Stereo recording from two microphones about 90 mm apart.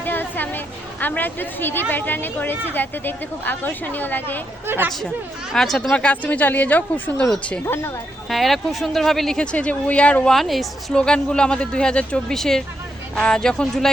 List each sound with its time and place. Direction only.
0.0 s a woman's voice: 20° left (ahead or behind)
4.6 s speech: 25° right (ahead or behind)
4.9 s speech: 5° left (ahead or behind)
7.6 s speech: 30° left (ahead or behind)
8.3 s speech: centre (ahead or behind)
10.3 s speech: centre (ahead or behind)